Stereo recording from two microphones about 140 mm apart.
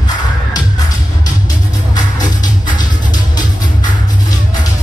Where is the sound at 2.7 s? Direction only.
30° left (ahead or behind).